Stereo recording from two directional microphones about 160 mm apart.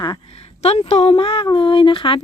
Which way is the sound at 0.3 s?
40° left (ahead or behind).